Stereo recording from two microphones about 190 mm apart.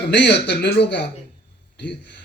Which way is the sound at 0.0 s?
60° left (ahead or behind).